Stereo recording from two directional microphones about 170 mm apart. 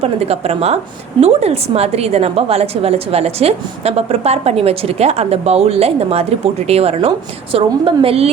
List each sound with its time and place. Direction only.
0.0 s a woman's voice: 35° right (ahead or behind)